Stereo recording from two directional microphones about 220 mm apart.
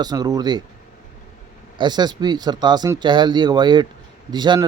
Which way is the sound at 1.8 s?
20° right (ahead or behind).